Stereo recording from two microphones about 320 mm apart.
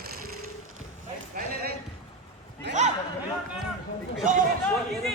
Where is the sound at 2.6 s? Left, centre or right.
Right.